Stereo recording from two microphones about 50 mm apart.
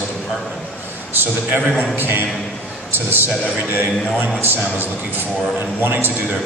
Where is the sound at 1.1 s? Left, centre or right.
Right.